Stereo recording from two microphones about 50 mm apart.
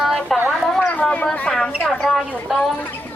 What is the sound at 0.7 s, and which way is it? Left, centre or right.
Speech, left.